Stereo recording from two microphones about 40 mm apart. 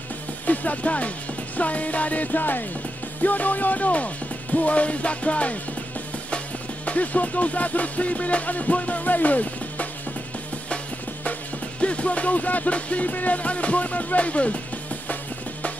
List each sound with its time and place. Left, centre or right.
0.5 s speech: left
1.6 s music: left
6.9 s music: left
11.8 s music: left